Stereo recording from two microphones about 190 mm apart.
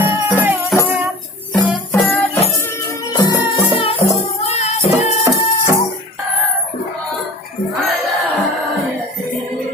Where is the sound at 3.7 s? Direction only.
30° left (ahead or behind).